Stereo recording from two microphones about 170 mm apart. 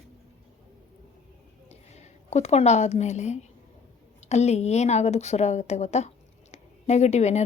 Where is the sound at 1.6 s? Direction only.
40° left (ahead or behind).